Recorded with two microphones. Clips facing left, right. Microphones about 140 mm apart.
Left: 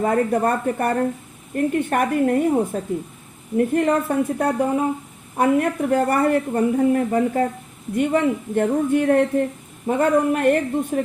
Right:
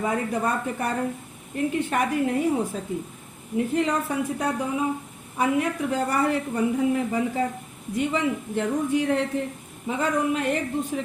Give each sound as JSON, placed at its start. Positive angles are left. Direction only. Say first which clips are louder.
{"t": 0.0, "sound": "speech", "louder": "left 6 dB", "side_deg": 50}